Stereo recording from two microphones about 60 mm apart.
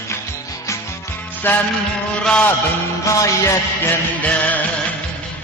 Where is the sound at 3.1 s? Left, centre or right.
Left.